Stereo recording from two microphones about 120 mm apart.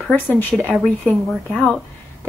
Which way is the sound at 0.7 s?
10° right (ahead or behind).